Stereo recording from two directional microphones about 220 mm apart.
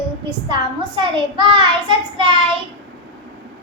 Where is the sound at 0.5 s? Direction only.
20° right (ahead or behind).